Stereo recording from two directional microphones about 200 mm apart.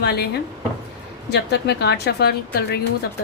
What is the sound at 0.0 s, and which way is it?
Speech, 55° left (ahead or behind).